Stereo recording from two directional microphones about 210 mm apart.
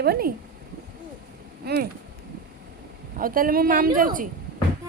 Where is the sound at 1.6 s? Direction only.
45° right (ahead or behind).